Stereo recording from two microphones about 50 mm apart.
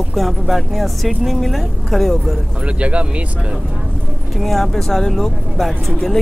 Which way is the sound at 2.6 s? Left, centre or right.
Right.